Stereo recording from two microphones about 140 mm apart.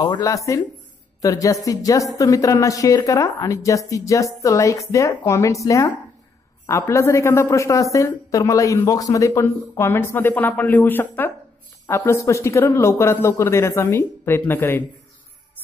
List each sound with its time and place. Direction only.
0.0 s a woman's voice: 25° left (ahead or behind)